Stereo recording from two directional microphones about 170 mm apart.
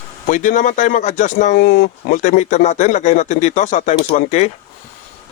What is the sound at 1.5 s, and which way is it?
Speech, 65° left (ahead or behind).